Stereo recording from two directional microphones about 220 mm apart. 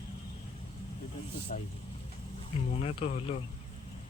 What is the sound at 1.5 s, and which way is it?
Speech, 35° left (ahead or behind).